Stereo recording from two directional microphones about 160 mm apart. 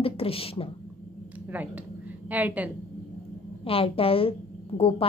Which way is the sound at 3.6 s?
35° left (ahead or behind).